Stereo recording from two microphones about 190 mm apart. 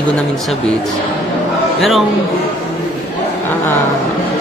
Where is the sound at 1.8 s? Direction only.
Centre (ahead or behind).